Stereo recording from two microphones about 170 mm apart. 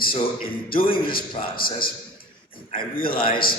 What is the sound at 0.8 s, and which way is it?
Speech, 30° left (ahead or behind).